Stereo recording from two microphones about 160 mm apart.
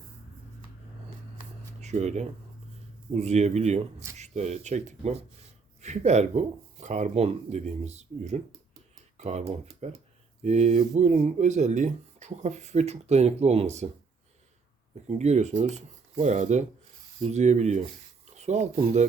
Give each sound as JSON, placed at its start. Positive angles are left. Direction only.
{"t": 1.8, "sound": "speech", "side_deg": -45}
{"t": 15.0, "sound": "speech", "side_deg": -45}